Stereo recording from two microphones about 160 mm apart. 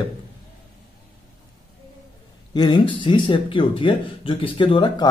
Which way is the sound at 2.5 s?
25° left (ahead or behind).